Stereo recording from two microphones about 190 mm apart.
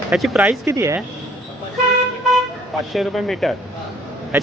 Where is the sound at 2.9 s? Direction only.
Centre (ahead or behind).